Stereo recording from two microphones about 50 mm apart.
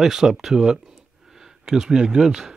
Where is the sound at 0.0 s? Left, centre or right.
Centre.